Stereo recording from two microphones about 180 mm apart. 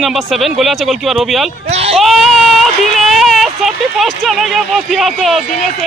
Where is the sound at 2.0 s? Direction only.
Centre (ahead or behind).